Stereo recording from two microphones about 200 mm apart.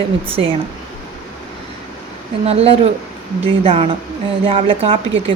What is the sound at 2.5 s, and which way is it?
Speech, 30° right (ahead or behind).